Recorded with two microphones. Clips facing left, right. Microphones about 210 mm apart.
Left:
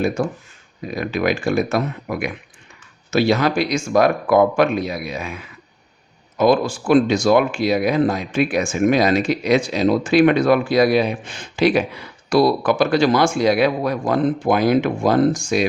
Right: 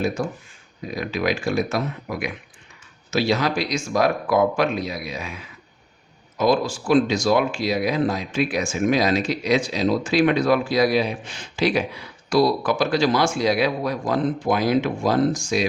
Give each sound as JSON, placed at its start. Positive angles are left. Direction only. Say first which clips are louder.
{"t": 0.9, "sound": "speech", "louder": "left 3 dB", "side_deg": 55}